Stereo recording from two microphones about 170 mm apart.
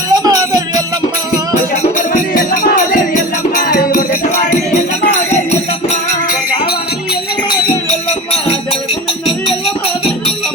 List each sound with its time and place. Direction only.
0.1 s music: 25° right (ahead or behind)
1.7 s music: 50° left (ahead or behind)
5.3 s music: 40° left (ahead or behind)
7.9 s music: 40° left (ahead or behind)